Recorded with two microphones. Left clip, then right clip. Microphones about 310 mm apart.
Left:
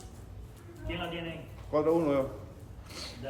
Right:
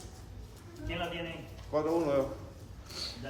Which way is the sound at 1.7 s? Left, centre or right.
Left.